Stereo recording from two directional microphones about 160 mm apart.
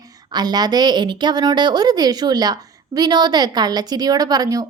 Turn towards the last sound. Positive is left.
turn(degrees=-20)  # may be behind; listen again after turning